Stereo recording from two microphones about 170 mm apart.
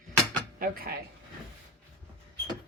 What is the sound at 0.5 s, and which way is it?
Speech, 60° right (ahead or behind).